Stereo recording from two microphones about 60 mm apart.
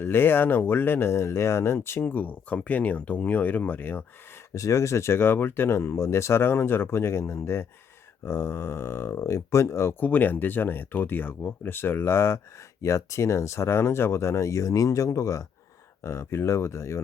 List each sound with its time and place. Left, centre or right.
0.0 s speech: left
4.5 s speech: left
10.0 s speech: left
16.0 s speech: left